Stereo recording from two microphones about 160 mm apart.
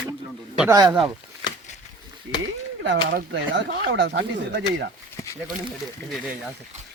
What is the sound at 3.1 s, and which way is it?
Speech, 65° right (ahead or behind).